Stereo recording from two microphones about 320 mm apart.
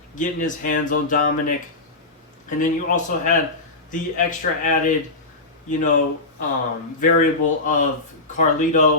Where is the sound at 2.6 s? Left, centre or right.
Left.